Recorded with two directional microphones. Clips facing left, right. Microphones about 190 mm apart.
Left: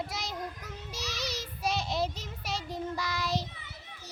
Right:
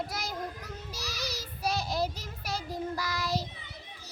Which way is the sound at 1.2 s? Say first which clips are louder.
Left 1 dB; 25° left (ahead or behind).